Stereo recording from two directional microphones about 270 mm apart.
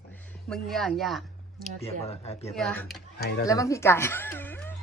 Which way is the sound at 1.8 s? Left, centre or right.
Left.